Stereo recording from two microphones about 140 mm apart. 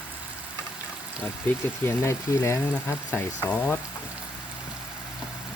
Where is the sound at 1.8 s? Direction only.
20° left (ahead or behind).